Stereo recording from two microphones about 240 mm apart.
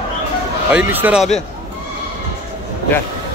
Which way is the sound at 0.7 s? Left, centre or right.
Centre.